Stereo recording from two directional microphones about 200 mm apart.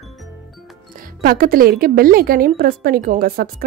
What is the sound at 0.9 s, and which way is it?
Speech, 45° right (ahead or behind).